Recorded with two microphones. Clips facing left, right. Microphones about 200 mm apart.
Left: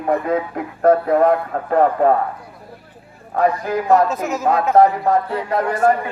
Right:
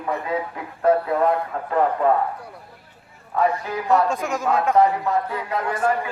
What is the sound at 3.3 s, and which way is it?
Speech, 45° left (ahead or behind).